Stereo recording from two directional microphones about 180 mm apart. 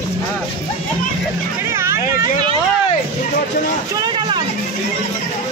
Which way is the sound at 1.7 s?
15° right (ahead or behind).